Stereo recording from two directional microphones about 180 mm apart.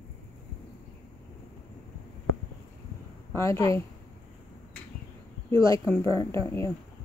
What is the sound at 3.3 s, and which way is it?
Speech, 15° left (ahead or behind).